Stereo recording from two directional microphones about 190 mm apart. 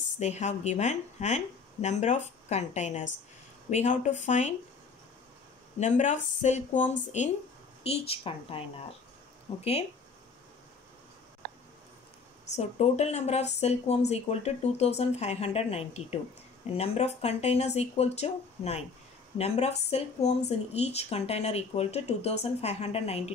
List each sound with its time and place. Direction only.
0.2 s speech: 35° left (ahead or behind)
5.8 s speech: 40° left (ahead or behind)
12.5 s speech: 35° left (ahead or behind)